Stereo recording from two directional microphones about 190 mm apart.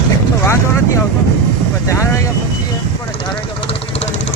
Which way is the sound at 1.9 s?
15° left (ahead or behind).